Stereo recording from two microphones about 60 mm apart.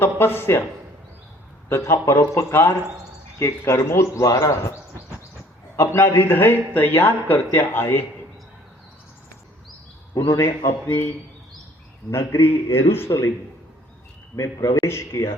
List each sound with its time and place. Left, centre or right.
0.0 s speech: left
1.7 s a man's voice: left
5.8 s speech: left
6.1 s speech: left
10.2 s speech: left
12.1 s speech: left
14.3 s a man's voice: left
14.8 s speech: left